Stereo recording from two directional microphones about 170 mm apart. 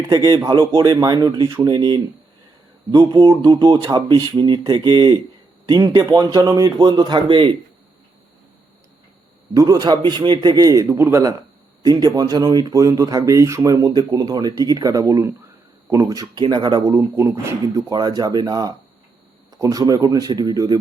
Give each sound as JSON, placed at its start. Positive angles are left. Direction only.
{"t": 0.1, "sound": "speech", "side_deg": -25}
{"t": 3.0, "sound": "speech", "side_deg": -25}
{"t": 9.6, "sound": "speech", "side_deg": -20}